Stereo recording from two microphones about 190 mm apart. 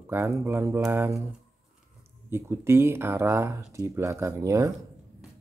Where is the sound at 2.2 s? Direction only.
15° right (ahead or behind).